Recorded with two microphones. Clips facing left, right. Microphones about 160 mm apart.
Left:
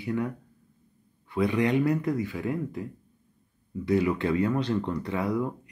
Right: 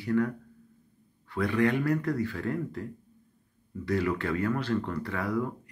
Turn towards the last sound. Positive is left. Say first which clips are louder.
# left 2 dB
turn(degrees=15)  # may be behind; listen again after turning